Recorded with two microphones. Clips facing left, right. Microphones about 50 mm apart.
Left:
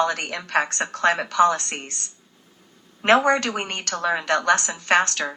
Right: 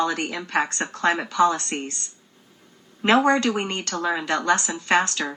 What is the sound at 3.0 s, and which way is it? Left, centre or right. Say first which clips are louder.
A woman's voice: even; left.